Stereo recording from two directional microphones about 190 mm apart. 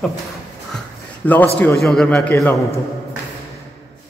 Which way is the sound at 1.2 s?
10° left (ahead or behind).